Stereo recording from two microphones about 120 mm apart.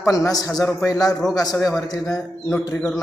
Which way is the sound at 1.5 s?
Centre (ahead or behind).